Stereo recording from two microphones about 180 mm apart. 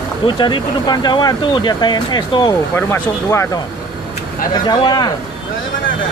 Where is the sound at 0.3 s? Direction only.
25° left (ahead or behind).